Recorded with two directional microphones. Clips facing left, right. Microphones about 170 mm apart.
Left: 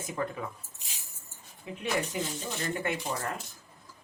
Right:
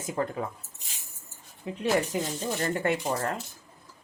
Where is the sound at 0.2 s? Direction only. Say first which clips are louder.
Right 3 dB; 45° right (ahead or behind).